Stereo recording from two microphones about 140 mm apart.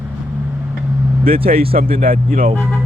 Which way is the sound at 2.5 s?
5° left (ahead or behind).